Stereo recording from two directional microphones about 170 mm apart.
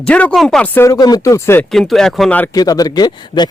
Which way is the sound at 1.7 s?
Centre (ahead or behind).